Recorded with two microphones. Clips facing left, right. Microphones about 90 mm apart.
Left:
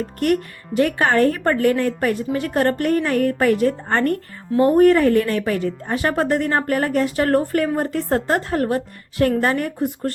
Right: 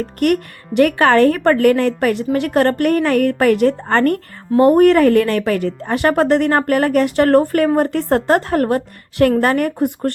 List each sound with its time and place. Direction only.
0.0 s a woman's voice: 65° right (ahead or behind)